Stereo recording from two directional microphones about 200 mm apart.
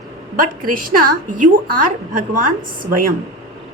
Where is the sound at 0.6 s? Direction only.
45° right (ahead or behind).